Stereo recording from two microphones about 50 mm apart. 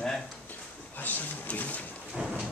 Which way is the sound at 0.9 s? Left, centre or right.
Left.